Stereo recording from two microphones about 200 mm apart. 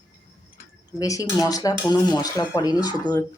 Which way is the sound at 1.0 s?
15° left (ahead or behind).